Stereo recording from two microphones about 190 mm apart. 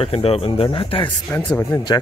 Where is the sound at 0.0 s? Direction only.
30° left (ahead or behind).